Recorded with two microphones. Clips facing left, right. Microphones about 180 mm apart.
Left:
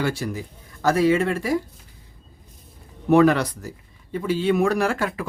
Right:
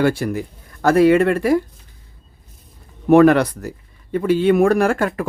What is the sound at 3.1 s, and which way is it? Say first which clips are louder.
Speech: right 5 dB; 55° right (ahead or behind).